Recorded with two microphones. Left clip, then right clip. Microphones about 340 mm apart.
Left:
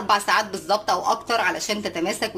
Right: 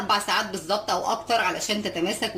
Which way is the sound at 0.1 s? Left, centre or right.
Left.